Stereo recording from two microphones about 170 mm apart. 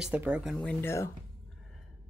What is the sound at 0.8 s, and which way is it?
Speech, 15° left (ahead or behind).